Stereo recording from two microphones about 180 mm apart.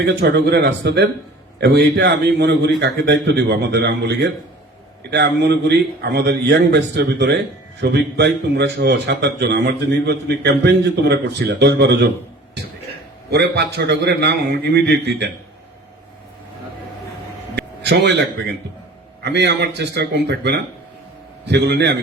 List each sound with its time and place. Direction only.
0.0 s a man's voice: 70° right (ahead or behind)
13.3 s a man's voice: 70° right (ahead or behind)
17.8 s a man's voice: 75° right (ahead or behind)